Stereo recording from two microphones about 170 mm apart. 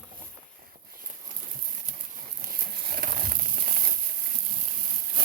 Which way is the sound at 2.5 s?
60° right (ahead or behind).